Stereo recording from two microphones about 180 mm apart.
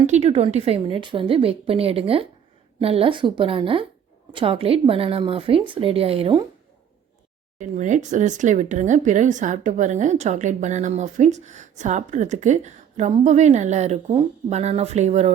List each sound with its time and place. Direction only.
0.1 s a woman's voice: 35° right (ahead or behind)
7.6 s speech: 45° right (ahead or behind)